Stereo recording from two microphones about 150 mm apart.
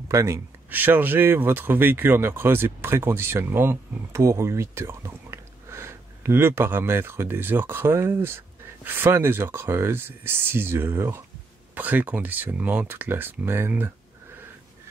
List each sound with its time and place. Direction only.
0.1 s speech: 20° right (ahead or behind)